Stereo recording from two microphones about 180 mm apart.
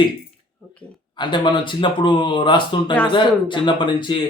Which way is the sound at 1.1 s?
25° left (ahead or behind).